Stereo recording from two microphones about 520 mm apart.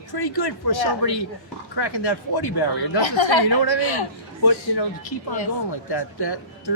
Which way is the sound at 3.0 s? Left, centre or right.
Left.